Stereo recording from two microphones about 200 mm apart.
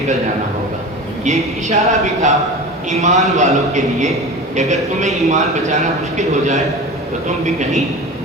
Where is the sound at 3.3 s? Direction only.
35° right (ahead or behind).